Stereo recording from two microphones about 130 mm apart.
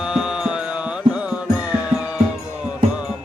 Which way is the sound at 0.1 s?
5° right (ahead or behind).